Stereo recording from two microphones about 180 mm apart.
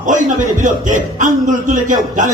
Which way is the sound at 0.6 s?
45° right (ahead or behind).